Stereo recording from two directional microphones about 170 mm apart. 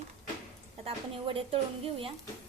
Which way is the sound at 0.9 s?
35° right (ahead or behind).